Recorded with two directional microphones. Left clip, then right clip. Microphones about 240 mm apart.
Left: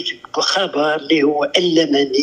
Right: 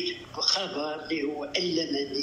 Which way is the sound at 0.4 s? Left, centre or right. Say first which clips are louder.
Left 12 dB; left.